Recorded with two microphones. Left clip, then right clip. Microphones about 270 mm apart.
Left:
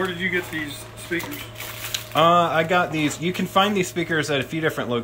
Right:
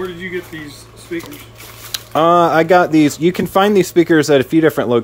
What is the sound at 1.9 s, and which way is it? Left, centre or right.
Speech, centre.